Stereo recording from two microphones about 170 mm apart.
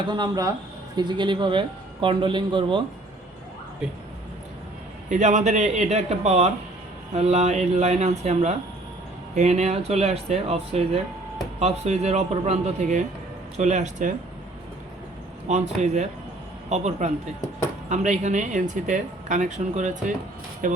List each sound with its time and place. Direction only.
0.0 s speech: 25° right (ahead or behind)
5.0 s speech: 45° right (ahead or behind)
15.8 s speech: 45° right (ahead or behind)